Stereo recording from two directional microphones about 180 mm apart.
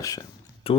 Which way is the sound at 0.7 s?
30° left (ahead or behind).